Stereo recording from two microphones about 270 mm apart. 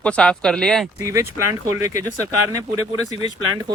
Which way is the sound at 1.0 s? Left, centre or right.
Centre.